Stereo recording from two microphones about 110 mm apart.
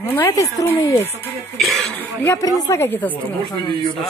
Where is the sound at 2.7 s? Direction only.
20° left (ahead or behind).